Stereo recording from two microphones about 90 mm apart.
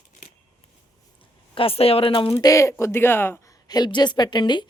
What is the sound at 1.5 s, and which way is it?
Speech, 90° left.